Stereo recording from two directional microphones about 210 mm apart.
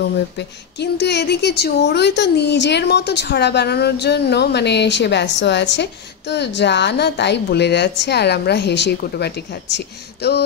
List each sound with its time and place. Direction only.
0.4 s speech: 55° left (ahead or behind)